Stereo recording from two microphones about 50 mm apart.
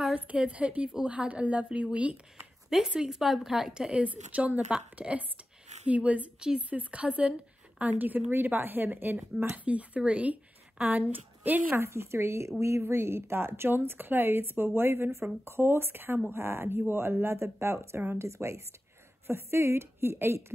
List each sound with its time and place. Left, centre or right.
0.1 s a woman's voice: right
2.9 s a woman's voice: centre
3.7 s a woman's voice: centre
4.0 s a woman's voice: right
7.8 s a woman's voice: right
9.5 s speech: right
11.7 s speech: right
12.8 s a woman's voice: right